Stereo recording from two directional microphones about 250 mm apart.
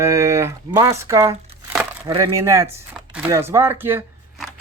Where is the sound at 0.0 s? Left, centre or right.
Centre.